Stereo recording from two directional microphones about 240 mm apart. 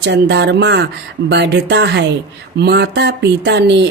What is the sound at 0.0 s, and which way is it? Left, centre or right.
Music, right.